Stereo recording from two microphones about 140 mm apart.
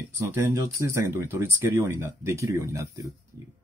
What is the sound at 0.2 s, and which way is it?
Speech, 20° right (ahead or behind).